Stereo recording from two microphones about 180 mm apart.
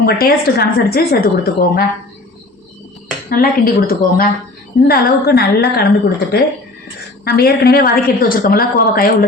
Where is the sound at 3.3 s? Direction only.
55° left (ahead or behind).